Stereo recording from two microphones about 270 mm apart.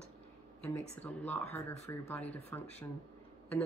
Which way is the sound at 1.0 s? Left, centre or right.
Centre.